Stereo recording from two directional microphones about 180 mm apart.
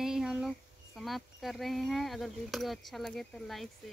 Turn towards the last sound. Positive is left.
turn(degrees=0)  # may be behind; listen again after turning